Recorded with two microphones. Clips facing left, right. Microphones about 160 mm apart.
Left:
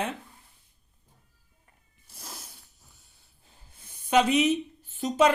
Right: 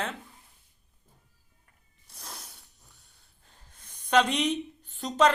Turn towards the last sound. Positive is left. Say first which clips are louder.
# left 1 dB
turn(degrees=5)  # may be behind; listen again after turning